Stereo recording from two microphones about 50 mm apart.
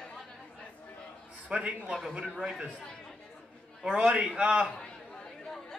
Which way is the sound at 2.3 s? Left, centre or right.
Centre.